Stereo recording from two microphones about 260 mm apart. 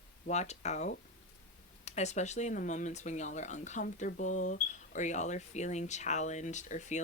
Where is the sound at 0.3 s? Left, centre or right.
Left.